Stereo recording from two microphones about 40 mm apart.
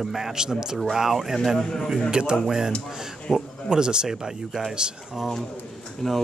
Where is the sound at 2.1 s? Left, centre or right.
Right.